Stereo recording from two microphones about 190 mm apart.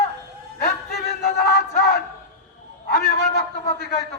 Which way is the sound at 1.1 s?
60° left (ahead or behind).